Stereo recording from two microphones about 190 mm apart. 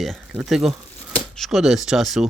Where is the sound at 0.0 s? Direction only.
Centre (ahead or behind).